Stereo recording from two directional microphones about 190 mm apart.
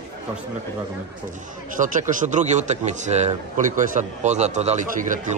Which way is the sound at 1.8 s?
40° right (ahead or behind).